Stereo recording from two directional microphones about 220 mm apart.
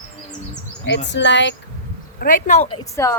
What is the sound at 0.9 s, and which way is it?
Speech, 55° left (ahead or behind).